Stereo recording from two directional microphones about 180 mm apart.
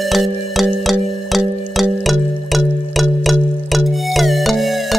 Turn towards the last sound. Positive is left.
turn(degrees=0)  # may be behind; listen again after turning